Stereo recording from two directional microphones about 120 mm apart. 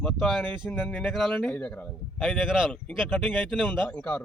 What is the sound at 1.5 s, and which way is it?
Speech, 15° left (ahead or behind).